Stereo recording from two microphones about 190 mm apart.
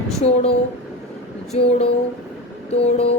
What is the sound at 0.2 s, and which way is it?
Speech, 35° left (ahead or behind).